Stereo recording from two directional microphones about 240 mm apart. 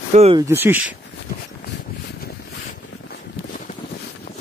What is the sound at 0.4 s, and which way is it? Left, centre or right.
Speech, centre.